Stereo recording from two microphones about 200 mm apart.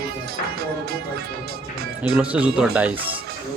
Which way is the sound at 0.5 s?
50° right (ahead or behind).